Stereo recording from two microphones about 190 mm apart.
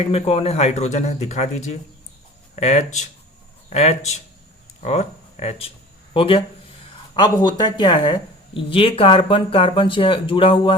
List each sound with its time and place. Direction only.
0.0 s speech: 30° left (ahead or behind)